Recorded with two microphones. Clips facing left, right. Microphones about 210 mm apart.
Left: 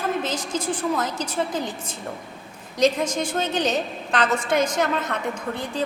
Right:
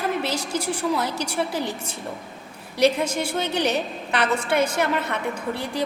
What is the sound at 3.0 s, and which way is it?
A woman's voice, 10° right (ahead or behind).